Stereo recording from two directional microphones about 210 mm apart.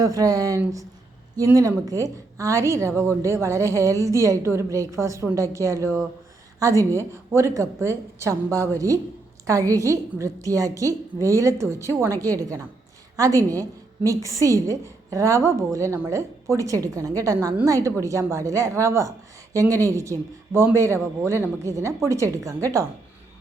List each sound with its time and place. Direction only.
0.0 s a woman's voice: 15° right (ahead or behind)